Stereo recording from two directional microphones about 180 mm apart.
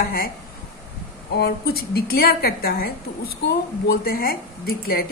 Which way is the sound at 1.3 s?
60° left (ahead or behind).